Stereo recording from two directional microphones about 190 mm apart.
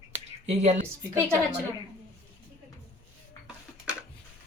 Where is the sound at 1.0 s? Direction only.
15° right (ahead or behind).